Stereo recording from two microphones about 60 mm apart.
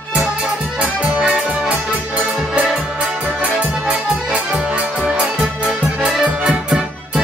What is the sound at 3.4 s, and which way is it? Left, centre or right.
Accordion, right.